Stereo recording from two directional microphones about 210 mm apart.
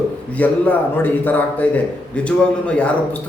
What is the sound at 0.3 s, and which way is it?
A man's voice, 10° left (ahead or behind).